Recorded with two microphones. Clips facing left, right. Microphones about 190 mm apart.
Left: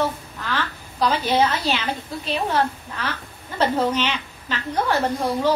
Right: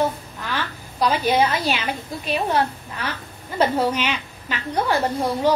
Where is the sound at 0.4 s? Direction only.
10° right (ahead or behind).